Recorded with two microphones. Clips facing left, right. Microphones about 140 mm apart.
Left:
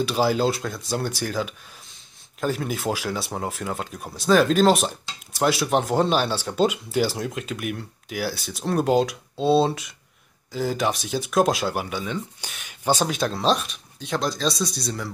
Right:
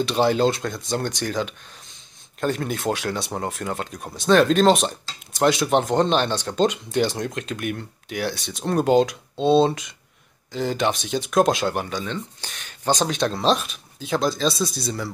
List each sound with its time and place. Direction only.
0.0 s speech: 5° left (ahead or behind)